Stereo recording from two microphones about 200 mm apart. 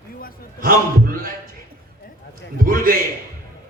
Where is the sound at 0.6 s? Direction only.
45° right (ahead or behind).